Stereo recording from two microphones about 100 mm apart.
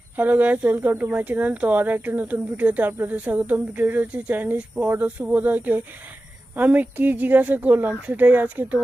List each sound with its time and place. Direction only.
0.2 s speech: 15° right (ahead or behind)